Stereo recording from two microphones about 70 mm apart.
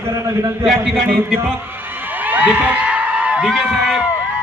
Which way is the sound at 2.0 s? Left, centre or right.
Right.